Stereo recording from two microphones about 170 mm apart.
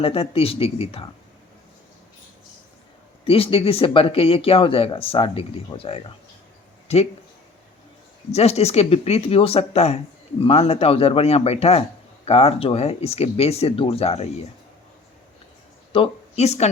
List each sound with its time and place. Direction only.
0.0 s speech: 35° left (ahead or behind)
3.2 s speech: 35° left (ahead or behind)
8.3 s speech: 40° left (ahead or behind)
15.9 s a woman's voice: 35° left (ahead or behind)